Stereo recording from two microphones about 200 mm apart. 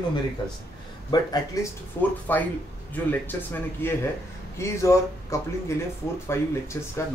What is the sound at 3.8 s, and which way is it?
Speech, 10° left (ahead or behind).